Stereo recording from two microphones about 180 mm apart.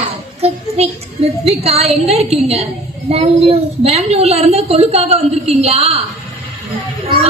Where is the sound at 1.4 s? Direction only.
35° right (ahead or behind).